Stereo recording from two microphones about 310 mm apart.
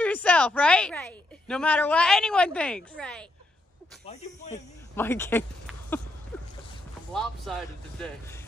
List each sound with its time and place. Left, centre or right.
0.0 s a woman's voice: centre
4.0 s speech: left
4.9 s speech: centre
6.3 s boat: centre
7.5 s a woman's voice: centre